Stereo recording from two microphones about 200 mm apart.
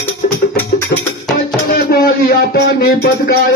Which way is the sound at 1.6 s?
50° left (ahead or behind).